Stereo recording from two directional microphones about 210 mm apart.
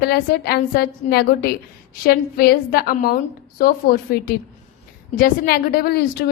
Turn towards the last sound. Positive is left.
turn(degrees=45)  # may be behind; listen again after turning